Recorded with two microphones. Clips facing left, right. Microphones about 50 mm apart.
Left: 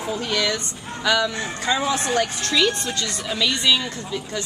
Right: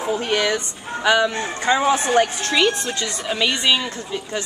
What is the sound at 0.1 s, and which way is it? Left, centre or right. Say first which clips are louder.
Speech: right 3 dB; right.